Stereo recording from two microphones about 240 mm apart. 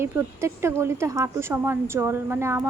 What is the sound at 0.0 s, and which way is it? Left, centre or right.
A woman's voice, centre.